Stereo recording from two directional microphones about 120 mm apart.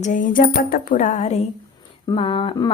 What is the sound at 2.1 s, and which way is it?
Speech, 45° left (ahead or behind).